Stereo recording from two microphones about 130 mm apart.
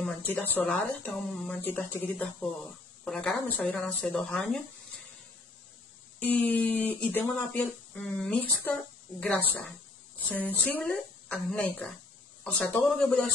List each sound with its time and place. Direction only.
0.0 s speech: 15° left (ahead or behind)
6.2 s a woman's voice: 15° left (ahead or behind)